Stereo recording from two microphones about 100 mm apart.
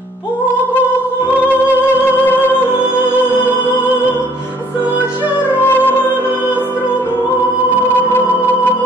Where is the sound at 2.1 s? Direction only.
20° left (ahead or behind).